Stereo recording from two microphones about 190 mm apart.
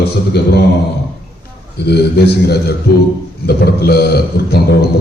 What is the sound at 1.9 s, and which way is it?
A man's voice, 60° left (ahead or behind).